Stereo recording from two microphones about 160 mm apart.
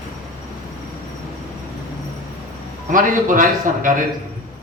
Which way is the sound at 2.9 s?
55° right (ahead or behind).